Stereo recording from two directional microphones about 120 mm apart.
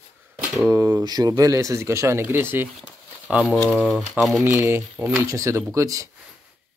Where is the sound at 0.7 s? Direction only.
25° right (ahead or behind).